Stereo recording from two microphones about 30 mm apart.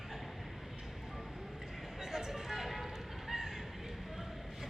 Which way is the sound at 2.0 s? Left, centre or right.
Centre.